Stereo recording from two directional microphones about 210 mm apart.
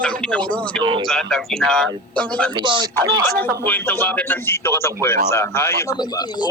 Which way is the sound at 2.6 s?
20° right (ahead or behind).